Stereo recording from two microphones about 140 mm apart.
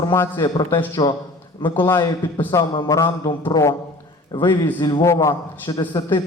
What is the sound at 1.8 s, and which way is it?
Speech, 20° left (ahead or behind).